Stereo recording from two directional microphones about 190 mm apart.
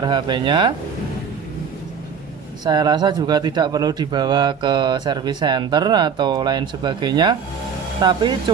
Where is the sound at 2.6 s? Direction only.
20° right (ahead or behind).